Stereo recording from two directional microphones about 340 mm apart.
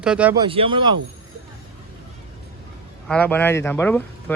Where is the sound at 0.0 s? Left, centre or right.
Centre.